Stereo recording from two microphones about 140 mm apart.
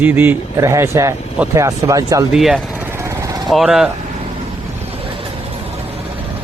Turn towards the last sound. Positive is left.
turn(degrees=-40)  # may be behind; listen again after turning